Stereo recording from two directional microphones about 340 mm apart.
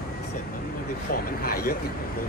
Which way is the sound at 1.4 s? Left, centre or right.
Left.